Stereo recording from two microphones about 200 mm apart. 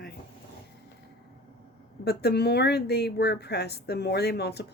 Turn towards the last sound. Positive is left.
turn(degrees=55)  # may be behind; listen again after turning